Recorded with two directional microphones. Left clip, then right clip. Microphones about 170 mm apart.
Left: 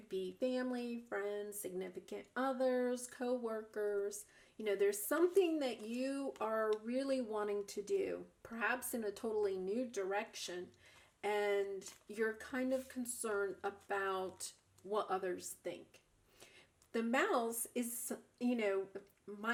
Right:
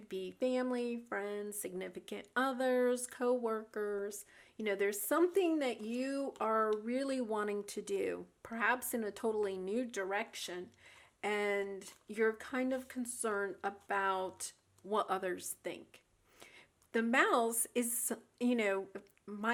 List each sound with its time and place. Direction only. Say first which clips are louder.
0.1 s speech: right 3 dB; 25° right (ahead or behind)
16.9 s speech: right 5 dB; 25° right (ahead or behind)